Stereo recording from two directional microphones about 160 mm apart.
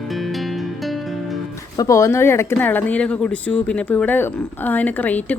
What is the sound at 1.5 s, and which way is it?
Speech, 20° left (ahead or behind).